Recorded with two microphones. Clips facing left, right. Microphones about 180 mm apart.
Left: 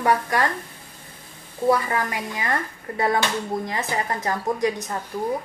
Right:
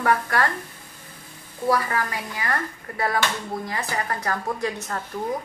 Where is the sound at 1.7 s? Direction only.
20° left (ahead or behind).